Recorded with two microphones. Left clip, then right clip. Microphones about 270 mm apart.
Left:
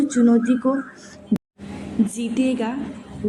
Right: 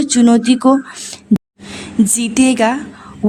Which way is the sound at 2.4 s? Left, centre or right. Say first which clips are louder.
Right 12 dB; right.